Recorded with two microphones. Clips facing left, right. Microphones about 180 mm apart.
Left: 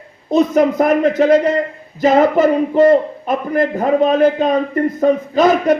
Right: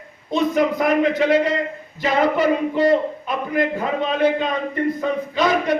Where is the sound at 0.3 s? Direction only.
45° left (ahead or behind).